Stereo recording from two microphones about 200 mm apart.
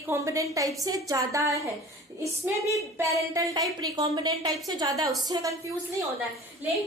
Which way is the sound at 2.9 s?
15° right (ahead or behind).